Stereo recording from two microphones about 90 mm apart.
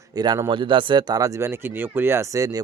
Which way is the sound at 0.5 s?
65° right (ahead or behind).